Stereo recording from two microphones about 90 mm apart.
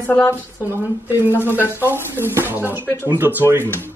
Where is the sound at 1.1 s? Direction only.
25° right (ahead or behind).